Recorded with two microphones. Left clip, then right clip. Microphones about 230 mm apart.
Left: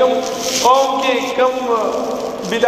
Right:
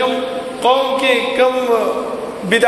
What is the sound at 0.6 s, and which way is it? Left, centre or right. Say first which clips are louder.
Speech: even; right.